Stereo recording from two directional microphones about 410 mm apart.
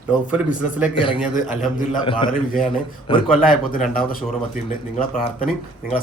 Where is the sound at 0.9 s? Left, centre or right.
Centre.